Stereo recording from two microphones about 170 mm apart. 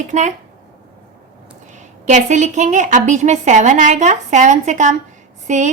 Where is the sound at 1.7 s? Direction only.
45° right (ahead or behind).